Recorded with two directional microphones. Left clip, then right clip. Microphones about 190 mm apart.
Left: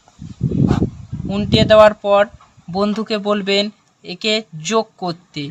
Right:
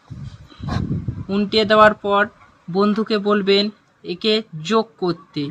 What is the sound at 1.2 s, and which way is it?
Speech, 25° left (ahead or behind).